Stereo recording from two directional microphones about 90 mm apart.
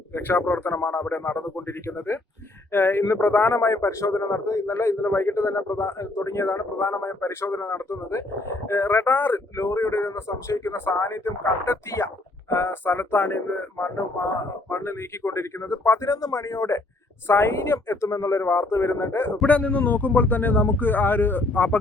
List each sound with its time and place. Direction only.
0.1 s speech: 20° left (ahead or behind)
2.7 s speech: 25° left (ahead or behind)
14.7 s a man's voice: 30° left (ahead or behind)